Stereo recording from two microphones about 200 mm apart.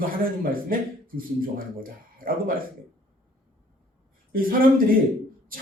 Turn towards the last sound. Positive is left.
turn(degrees=-45)  # may be behind; listen again after turning